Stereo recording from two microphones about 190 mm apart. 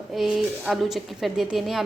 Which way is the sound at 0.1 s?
Centre (ahead or behind).